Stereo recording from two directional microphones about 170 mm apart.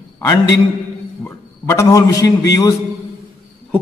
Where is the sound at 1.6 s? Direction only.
20° left (ahead or behind).